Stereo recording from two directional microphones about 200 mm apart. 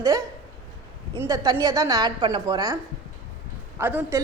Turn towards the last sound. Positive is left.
turn(degrees=-10)  # may be behind; listen again after turning